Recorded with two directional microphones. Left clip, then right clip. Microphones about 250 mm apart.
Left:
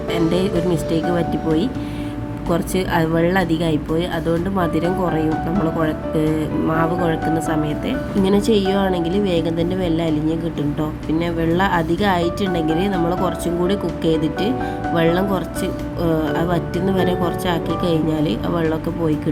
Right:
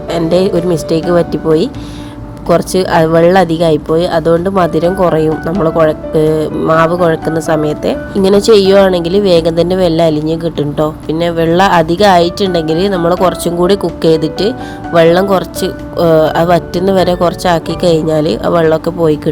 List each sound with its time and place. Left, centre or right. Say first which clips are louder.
0.1 s speech: right 9 dB; right